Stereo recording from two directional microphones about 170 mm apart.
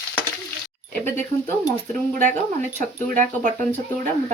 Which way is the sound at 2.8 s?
50° right (ahead or behind).